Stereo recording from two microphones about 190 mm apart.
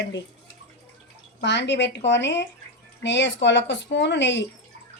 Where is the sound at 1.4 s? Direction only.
65° left (ahead or behind).